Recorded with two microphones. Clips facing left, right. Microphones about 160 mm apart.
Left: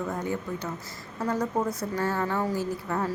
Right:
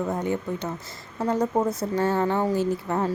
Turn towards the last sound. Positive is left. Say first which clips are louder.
# right 5 dB
turn(degrees=-25)  # may be behind; listen again after turning